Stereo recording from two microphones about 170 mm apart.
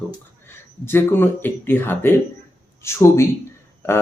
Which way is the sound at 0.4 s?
15° left (ahead or behind).